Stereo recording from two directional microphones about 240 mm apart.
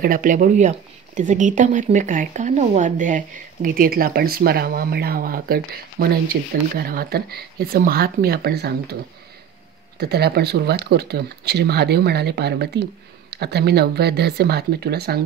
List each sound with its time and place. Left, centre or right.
0.0 s speech: right
9.9 s speech: right